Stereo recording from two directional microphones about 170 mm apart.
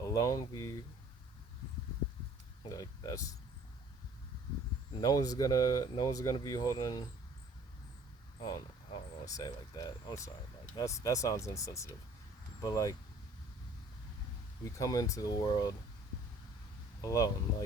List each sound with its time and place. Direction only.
0.0 s speech: 20° left (ahead or behind)
2.6 s speech: 20° left (ahead or behind)
4.9 s speech: 20° left (ahead or behind)
8.4 s speech: 25° left (ahead or behind)
14.6 s speech: 20° left (ahead or behind)
17.0 s speech: 20° left (ahead or behind)